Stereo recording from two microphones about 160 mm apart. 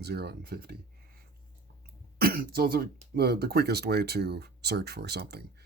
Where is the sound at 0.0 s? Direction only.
90° right.